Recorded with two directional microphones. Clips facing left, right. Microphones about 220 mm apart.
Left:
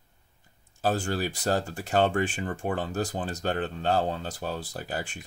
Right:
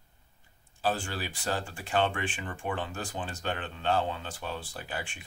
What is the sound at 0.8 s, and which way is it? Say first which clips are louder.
Speech: left 5 dB; 45° left (ahead or behind).